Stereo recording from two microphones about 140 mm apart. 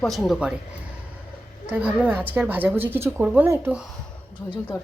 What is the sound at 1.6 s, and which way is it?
A woman's voice, 10° right (ahead or behind).